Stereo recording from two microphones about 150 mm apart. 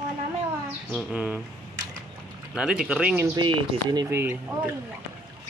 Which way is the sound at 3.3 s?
30° right (ahead or behind).